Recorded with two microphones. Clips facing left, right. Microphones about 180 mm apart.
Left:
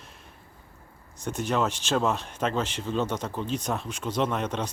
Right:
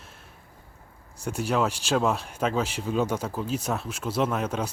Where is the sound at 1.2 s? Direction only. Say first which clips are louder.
Right 1 dB; 10° right (ahead or behind).